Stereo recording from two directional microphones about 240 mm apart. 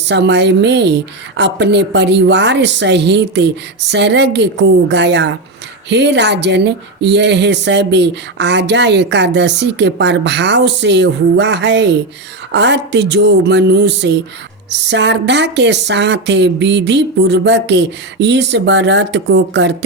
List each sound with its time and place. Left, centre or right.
0.0 s speech: right